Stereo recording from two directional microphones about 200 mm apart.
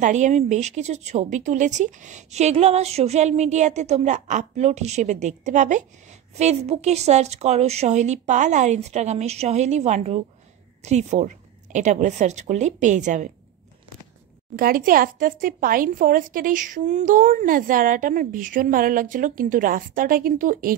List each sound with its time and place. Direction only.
0.0 s a woman's voice: 35° right (ahead or behind)
14.5 s a woman's voice: 45° right (ahead or behind)